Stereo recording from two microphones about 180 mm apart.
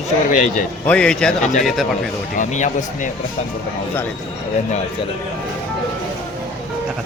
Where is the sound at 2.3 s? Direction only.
45° left (ahead or behind).